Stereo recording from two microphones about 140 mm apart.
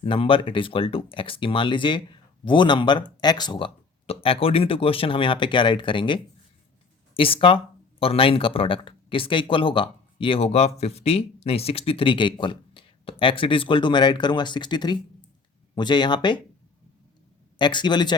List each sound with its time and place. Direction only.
0.0 s speech: 40° left (ahead or behind)
17.6 s speech: 35° left (ahead or behind)